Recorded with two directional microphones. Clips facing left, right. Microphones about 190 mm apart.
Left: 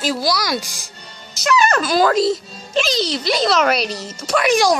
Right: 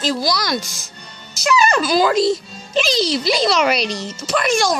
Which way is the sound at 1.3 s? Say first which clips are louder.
Even; centre (ahead or behind).